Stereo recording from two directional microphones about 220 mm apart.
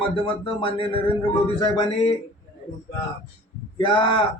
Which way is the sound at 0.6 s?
25° left (ahead or behind).